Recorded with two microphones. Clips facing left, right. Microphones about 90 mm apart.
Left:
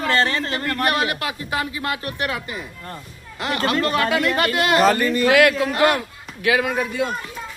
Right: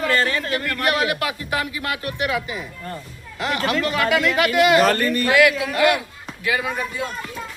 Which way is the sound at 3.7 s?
35° left (ahead or behind).